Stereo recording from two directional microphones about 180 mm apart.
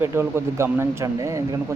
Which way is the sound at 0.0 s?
15° right (ahead or behind).